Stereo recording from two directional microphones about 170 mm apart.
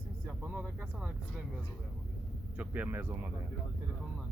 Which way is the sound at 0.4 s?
10° right (ahead or behind).